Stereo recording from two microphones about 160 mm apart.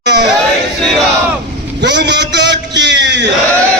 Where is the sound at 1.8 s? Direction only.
90° right.